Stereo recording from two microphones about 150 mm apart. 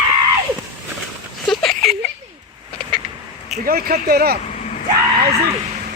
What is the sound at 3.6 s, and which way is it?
Speech, 80° right.